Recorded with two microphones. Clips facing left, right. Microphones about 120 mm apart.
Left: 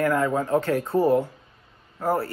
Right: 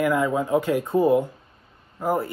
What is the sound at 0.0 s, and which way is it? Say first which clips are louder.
Speech: right 1 dB; 15° right (ahead or behind).